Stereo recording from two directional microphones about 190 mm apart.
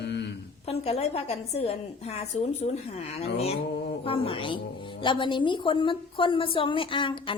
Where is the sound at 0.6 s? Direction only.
30° left (ahead or behind).